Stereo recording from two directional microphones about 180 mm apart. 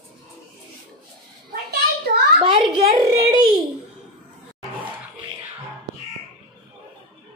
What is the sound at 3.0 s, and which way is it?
Speech, 20° right (ahead or behind).